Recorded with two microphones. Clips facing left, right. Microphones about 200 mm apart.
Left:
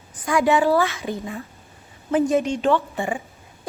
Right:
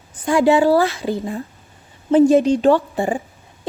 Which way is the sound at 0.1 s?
30° right (ahead or behind).